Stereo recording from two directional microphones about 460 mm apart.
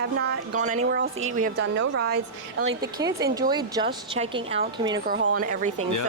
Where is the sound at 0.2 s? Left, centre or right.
Centre.